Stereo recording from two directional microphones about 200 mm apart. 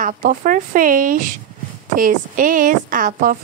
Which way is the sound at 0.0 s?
45° right (ahead or behind).